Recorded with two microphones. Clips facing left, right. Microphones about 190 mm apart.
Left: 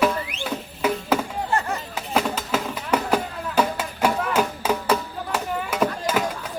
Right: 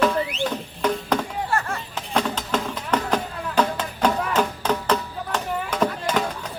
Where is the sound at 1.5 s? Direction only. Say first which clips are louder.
Left 3 dB; 20° left (ahead or behind).